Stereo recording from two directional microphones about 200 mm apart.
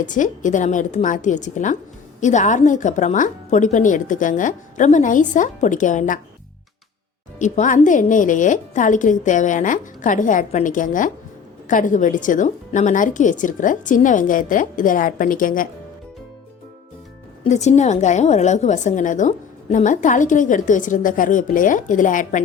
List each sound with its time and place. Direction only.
0.0 s a woman's voice: 40° left (ahead or behind)
7.3 s a woman's voice: 40° left (ahead or behind)
17.4 s a woman's voice: 35° left (ahead or behind)